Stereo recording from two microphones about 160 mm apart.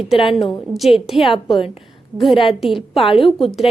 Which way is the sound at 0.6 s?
Centre (ahead or behind).